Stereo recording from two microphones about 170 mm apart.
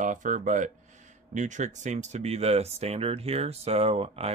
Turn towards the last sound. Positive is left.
turn(degrees=-35)  # may be behind; listen again after turning